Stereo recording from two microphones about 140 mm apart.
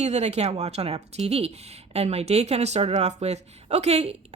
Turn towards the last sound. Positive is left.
turn(degrees=-50)  # may be behind; listen again after turning